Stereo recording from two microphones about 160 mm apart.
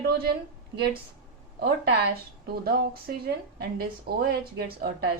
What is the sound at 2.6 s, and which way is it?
Speech, 75° right (ahead or behind).